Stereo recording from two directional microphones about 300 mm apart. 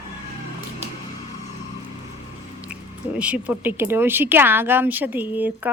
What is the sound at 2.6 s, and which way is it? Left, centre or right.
Speech, centre.